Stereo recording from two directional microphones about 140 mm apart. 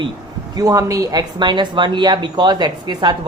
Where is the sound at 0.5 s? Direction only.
25° right (ahead or behind).